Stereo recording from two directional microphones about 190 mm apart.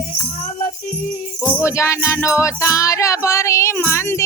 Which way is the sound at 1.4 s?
5° right (ahead or behind).